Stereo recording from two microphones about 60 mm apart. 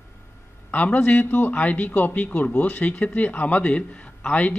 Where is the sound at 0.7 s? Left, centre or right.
Left.